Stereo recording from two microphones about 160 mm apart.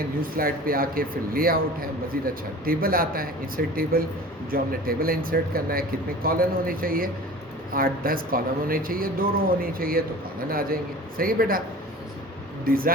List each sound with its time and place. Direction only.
0.2 s a man's voice: 65° right (ahead or behind)
12.6 s a man's voice: 65° right (ahead or behind)